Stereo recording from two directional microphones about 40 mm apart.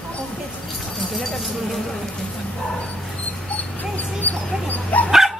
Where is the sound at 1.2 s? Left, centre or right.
Centre.